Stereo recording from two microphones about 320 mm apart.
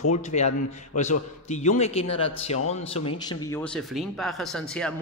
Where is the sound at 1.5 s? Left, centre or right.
Left.